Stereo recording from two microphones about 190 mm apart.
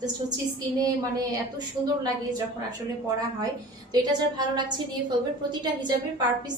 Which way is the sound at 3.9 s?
20° right (ahead or behind).